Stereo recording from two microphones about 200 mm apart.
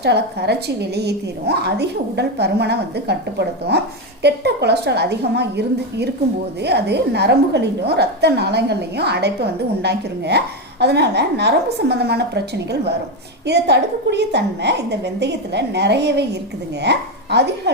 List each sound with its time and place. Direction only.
0.0 s a woman's voice: 55° right (ahead or behind)